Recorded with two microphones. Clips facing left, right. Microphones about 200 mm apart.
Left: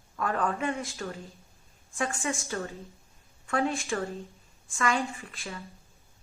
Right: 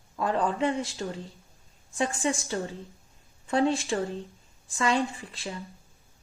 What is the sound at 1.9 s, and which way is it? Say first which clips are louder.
A woman's voice: right 4 dB; 30° right (ahead or behind).